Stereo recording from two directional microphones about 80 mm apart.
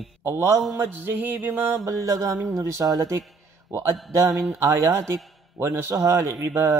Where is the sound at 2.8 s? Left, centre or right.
Right.